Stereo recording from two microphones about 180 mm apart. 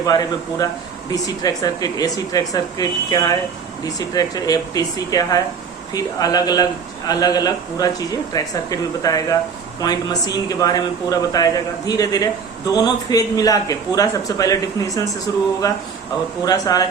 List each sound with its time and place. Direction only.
0.0 s speech: 20° left (ahead or behind)